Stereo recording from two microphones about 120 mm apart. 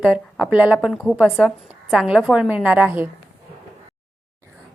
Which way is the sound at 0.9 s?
10° left (ahead or behind).